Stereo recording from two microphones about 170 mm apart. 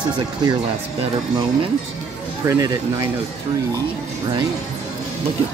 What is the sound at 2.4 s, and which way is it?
Speech, 20° right (ahead or behind).